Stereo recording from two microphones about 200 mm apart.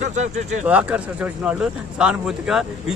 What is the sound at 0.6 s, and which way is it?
Speech, 5° right (ahead or behind).